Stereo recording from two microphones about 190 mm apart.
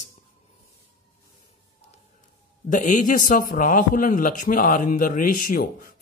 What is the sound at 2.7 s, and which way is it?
A man's voice, 40° left (ahead or behind).